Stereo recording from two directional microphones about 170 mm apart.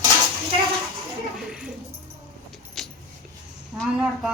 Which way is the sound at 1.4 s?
5° right (ahead or behind).